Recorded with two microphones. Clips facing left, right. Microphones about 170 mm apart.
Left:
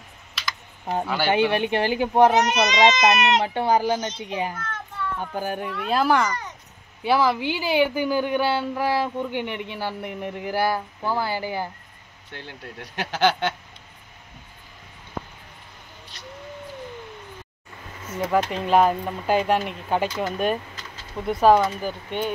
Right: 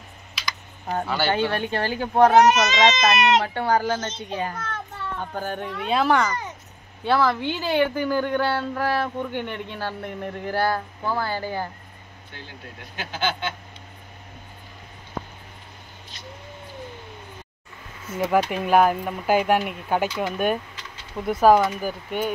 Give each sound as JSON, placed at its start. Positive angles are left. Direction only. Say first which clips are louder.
{"t": 0.3, "sound": "computer keyboard", "louder": "even", "side_deg": 0}
{"t": 0.9, "sound": "speech", "louder": "left 2 dB", "side_deg": 15}
{"t": 12.9, "sound": "a sound", "louder": "left 6 dB", "side_deg": 75}
{"t": 18.1, "sound": "speech", "louder": "right 1 dB", "side_deg": -5}